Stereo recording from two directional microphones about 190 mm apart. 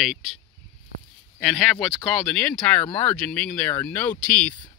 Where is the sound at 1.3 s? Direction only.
Centre (ahead or behind).